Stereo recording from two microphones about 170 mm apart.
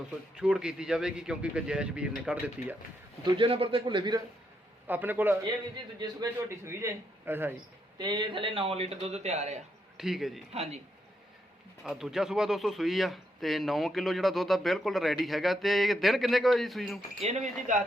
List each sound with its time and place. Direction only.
0.3 s speech: 5° right (ahead or behind)
3.2 s a man's voice: 30° right (ahead or behind)
4.9 s a man's voice: 10° right (ahead or behind)
7.9 s a man's voice: 25° right (ahead or behind)
10.0 s speech: centre (ahead or behind)
10.5 s a man's voice: 40° right (ahead or behind)
11.8 s speech: centre (ahead or behind)
17.2 s speech: 40° right (ahead or behind)